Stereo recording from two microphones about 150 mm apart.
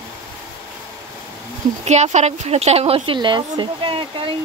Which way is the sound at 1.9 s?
50° right (ahead or behind).